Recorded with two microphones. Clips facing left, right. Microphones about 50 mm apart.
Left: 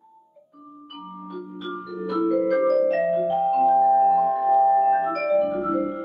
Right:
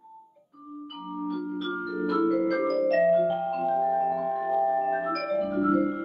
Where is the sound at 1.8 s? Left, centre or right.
Centre.